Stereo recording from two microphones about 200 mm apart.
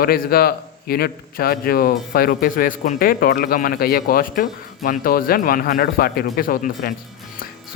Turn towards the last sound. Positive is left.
turn(degrees=45)  # may be behind; listen again after turning